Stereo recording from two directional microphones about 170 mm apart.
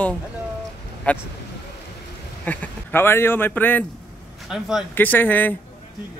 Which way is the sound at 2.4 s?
15° left (ahead or behind).